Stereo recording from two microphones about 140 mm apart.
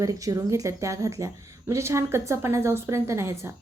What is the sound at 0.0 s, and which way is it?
A woman's voice, 25° right (ahead or behind).